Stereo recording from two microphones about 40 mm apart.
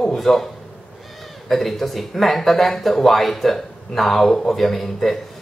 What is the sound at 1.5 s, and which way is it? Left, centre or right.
Speech, centre.